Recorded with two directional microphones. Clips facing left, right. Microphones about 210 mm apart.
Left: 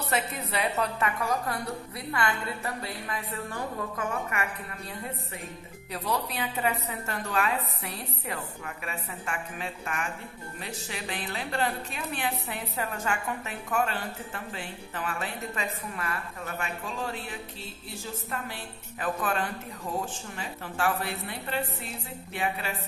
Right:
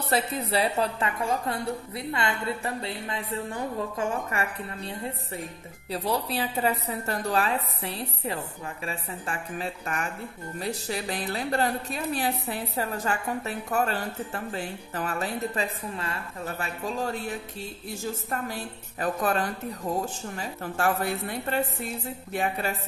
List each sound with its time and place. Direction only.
0.1 s a woman's voice: 30° right (ahead or behind)
18.3 s a woman's voice: 40° right (ahead or behind)